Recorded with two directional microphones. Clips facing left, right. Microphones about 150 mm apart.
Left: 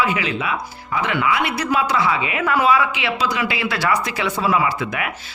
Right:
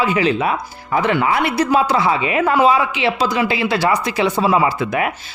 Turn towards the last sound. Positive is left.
turn(degrees=-30)  # may be behind; listen again after turning